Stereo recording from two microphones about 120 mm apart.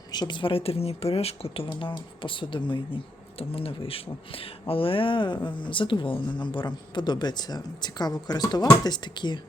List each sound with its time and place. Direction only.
0.1 s speech: 40° left (ahead or behind)